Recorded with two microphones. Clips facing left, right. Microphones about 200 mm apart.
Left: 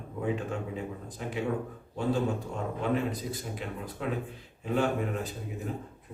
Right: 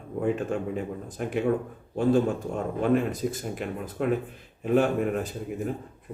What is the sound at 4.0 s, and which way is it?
Speech, 55° right (ahead or behind).